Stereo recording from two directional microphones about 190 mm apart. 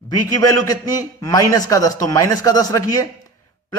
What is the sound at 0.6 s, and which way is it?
A man's voice, 20° left (ahead or behind).